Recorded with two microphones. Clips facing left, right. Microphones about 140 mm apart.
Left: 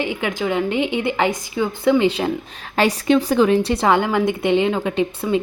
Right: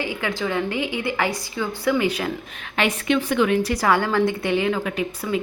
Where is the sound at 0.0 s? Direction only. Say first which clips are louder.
Left 3 dB; 20° left (ahead or behind).